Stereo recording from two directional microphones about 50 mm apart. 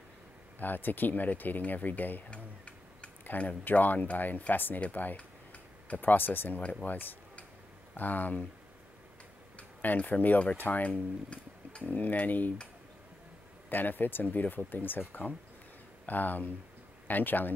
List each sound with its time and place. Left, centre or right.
0.6 s speech: left
2.3 s tick-tock: left
3.3 s speech: left
4.8 s tick-tock: left
5.9 s speech: left
6.6 s speech: left
9.6 s speech: left
13.7 s speech: left